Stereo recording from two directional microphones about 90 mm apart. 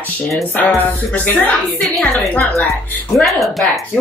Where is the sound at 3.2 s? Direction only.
Centre (ahead or behind).